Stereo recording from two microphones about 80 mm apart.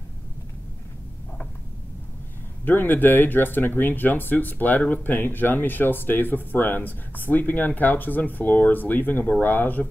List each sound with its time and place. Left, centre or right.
2.6 s speech: left